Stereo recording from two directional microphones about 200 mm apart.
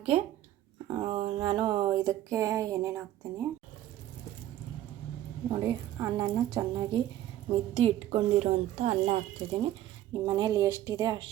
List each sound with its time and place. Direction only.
0.9 s speech: 20° right (ahead or behind)
5.5 s speech: 15° right (ahead or behind)